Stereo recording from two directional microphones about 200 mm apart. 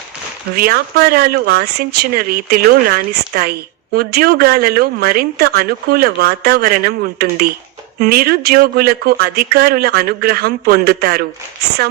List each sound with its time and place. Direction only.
0.5 s speech: 50° right (ahead or behind)